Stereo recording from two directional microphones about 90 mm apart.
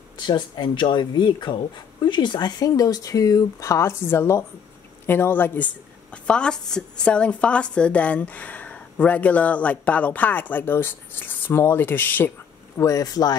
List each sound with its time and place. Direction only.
0.3 s a woman's voice: 55° left (ahead or behind); by 5.7 s 20° left (ahead or behind)
6.2 s a woman's voice: 10° left (ahead or behind)
12.7 s speech: 40° left (ahead or behind)